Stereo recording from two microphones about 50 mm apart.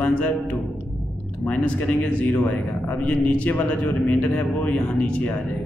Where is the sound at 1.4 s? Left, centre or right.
Left.